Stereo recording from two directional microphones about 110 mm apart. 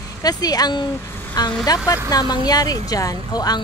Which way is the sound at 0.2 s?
35° left (ahead or behind).